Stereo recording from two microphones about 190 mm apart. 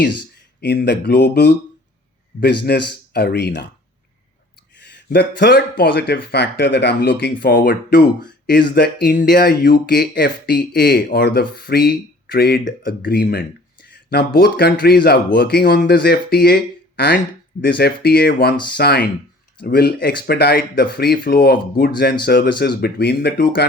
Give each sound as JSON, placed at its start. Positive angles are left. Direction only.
{"t": 0.6, "sound": "speech", "side_deg": 60}
{"t": 4.8, "sound": "speech", "side_deg": 60}
{"t": 17.6, "sound": "speech", "side_deg": 55}